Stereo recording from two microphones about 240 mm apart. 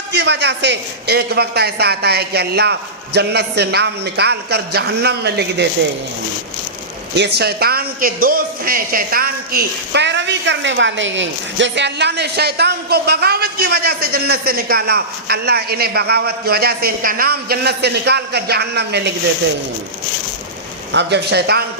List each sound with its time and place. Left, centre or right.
0.1 s a man's voice: right
7.3 s speech: right
20.9 s a man's voice: right